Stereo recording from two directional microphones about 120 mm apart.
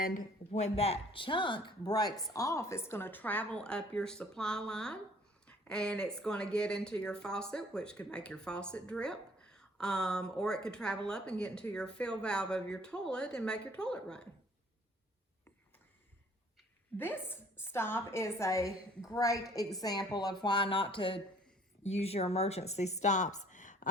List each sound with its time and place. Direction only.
0.1 s speech: 65° left (ahead or behind); by 14.3 s 5° left (ahead or behind)
17.0 s a woman's voice: 15° left (ahead or behind); by 21.2 s 45° left (ahead or behind)
21.8 s speech: 60° left (ahead or behind); by 23.9 s 90° left